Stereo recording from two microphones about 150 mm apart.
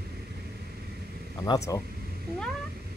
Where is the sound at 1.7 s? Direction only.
25° left (ahead or behind).